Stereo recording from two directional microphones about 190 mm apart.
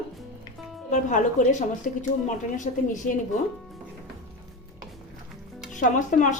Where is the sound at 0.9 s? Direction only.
40° left (ahead or behind).